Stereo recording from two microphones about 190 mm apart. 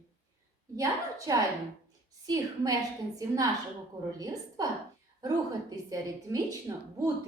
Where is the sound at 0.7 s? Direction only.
20° right (ahead or behind).